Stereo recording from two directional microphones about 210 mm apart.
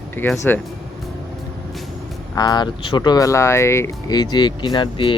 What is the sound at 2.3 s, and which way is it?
Speech, 20° left (ahead or behind).